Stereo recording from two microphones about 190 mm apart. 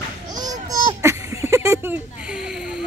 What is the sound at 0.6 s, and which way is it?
Children playing, 15° right (ahead or behind).